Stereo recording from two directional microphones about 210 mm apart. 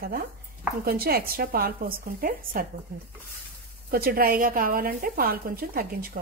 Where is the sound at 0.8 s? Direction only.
45° right (ahead or behind).